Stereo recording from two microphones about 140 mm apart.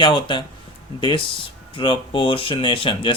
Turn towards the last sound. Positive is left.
turn(degrees=35)  # may be behind; listen again after turning